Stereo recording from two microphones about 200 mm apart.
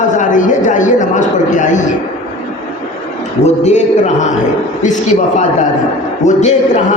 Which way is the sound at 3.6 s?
35° left (ahead or behind).